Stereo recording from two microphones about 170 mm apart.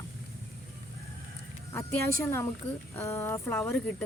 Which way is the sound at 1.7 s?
15° left (ahead or behind).